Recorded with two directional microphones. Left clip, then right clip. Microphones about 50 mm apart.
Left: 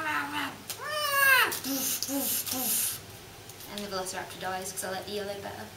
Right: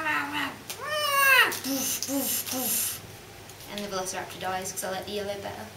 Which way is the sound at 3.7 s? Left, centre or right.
Centre.